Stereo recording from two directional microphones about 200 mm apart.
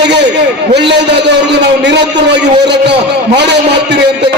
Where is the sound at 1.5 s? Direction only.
60° right (ahead or behind).